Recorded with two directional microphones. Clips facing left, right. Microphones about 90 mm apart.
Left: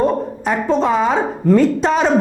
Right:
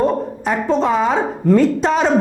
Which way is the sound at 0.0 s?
25° left (ahead or behind).